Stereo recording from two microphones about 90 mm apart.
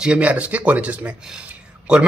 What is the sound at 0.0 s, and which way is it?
Speech, 15° right (ahead or behind).